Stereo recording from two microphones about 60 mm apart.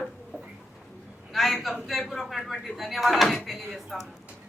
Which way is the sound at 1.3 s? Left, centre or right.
Centre.